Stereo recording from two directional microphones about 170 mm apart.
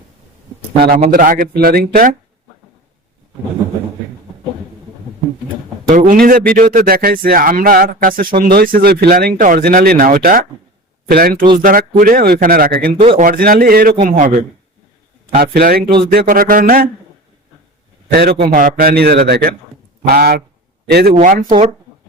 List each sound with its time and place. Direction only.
0.8 s speech: 60° right (ahead or behind)
5.9 s speech: 50° right (ahead or behind)
14.0 s speech: 50° right (ahead or behind)
15.4 s speech: 60° right (ahead or behind)
18.1 s a man's voice: 65° right (ahead or behind)
18.4 s speech: 55° right (ahead or behind)
21.2 s speech: 50° right (ahead or behind)